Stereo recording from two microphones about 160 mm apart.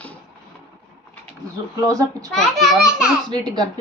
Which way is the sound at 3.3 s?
25° right (ahead or behind).